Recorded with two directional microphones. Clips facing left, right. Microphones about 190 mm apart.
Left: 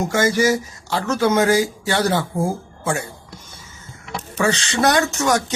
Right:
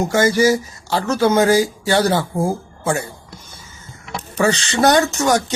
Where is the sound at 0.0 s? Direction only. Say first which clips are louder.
Right 3 dB; 30° right (ahead or behind).